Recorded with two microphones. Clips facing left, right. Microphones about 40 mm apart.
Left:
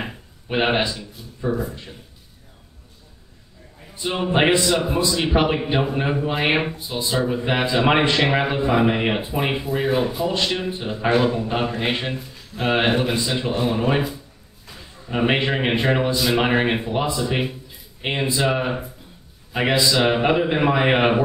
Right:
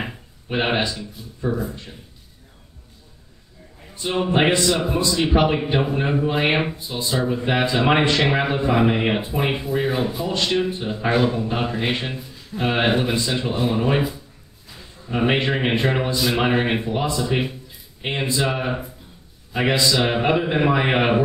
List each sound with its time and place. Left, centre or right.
0.0 s speech: centre
3.9 s a man's voice: centre
7.6 s a man's voice: centre
8.3 s speech: centre
11.8 s a man's voice: centre
13.7 s speech: centre
15.1 s a man's voice: centre
19.5 s speech: centre
20.1 s a man's voice: centre